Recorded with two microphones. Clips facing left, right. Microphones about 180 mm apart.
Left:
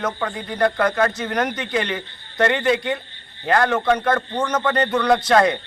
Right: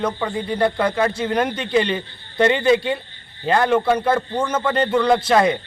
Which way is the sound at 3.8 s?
10° right (ahead or behind).